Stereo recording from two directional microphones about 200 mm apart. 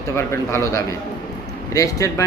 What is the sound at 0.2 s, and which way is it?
A man's voice, 15° left (ahead or behind).